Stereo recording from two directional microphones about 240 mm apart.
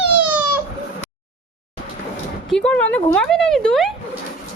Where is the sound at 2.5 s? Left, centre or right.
Centre.